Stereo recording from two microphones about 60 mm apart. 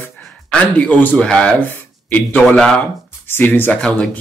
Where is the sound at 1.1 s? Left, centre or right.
Centre.